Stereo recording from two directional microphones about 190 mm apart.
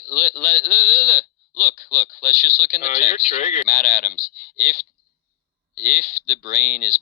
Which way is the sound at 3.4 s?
40° left (ahead or behind).